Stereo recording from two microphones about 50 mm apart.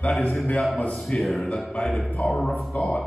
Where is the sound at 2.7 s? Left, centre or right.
Left.